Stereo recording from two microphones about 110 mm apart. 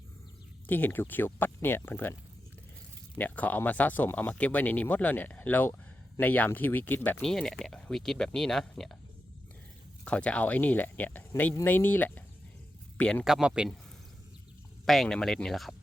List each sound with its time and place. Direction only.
0.7 s speech: 20° left (ahead or behind)
3.2 s speech: 15° left (ahead or behind)
7.2 s speech: 5° left (ahead or behind)
10.0 s speech: 10° left (ahead or behind)
13.2 s speech: 5° right (ahead or behind)
14.8 s speech: 5° left (ahead or behind)